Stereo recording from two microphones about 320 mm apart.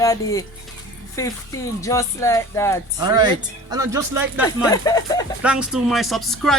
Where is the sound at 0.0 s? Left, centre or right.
Centre.